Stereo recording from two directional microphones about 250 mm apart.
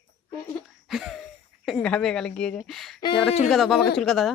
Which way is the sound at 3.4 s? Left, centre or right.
Centre.